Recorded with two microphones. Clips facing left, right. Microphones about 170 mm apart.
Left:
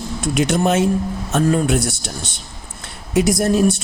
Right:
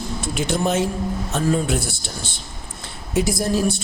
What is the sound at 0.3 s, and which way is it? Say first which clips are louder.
Speech: left 4 dB; 75° left (ahead or behind).